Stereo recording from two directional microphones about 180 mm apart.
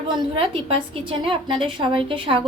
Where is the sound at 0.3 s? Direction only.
30° right (ahead or behind).